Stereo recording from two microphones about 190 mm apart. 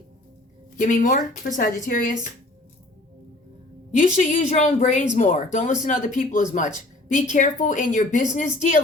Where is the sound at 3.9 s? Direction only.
40° left (ahead or behind).